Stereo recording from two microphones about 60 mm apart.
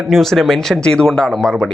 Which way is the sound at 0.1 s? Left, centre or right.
Centre.